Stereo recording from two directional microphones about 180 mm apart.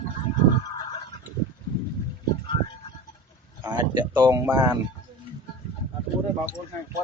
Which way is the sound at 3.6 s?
25° right (ahead or behind).